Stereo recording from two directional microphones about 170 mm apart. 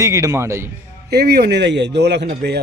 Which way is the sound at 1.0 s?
70° right (ahead or behind).